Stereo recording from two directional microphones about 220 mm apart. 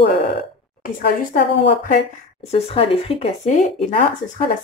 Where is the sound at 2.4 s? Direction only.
25° left (ahead or behind).